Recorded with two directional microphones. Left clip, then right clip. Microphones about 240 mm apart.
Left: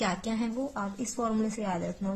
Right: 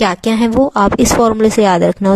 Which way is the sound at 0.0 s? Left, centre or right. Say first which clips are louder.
Right 18 dB; right.